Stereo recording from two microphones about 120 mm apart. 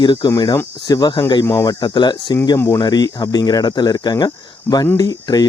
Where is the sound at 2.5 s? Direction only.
25° left (ahead or behind).